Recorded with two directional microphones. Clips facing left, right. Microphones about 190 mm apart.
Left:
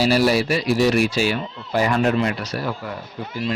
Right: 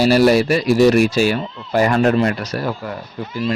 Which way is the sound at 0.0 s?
45° right (ahead or behind).